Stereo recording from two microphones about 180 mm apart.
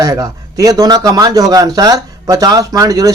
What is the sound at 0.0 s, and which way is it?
A man's voice, 20° right (ahead or behind).